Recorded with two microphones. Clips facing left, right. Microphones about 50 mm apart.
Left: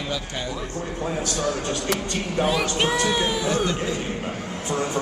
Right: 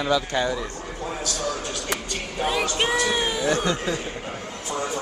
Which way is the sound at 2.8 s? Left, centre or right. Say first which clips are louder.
Right 1 dB; centre.